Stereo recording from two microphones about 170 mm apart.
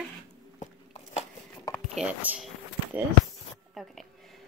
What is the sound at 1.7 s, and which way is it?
Speech, 5° right (ahead or behind).